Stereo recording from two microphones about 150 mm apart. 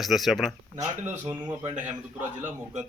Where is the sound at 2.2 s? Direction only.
15° right (ahead or behind).